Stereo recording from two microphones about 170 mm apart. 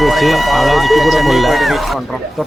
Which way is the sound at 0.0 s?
Centre (ahead or behind).